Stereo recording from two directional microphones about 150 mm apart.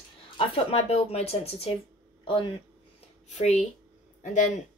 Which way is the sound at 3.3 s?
50° left (ahead or behind).